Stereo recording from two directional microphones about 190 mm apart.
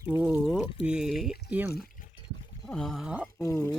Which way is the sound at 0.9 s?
5° right (ahead or behind).